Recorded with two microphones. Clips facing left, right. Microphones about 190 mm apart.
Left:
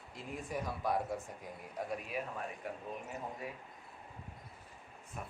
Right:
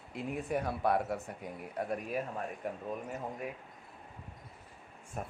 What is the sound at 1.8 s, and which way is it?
Speech, 50° right (ahead or behind).